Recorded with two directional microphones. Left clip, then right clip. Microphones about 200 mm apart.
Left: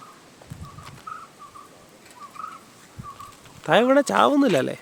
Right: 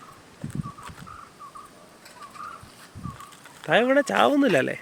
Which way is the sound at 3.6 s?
30° left (ahead or behind).